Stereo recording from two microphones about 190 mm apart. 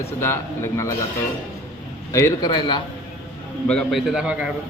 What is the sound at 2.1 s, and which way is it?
Speech, 15° left (ahead or behind).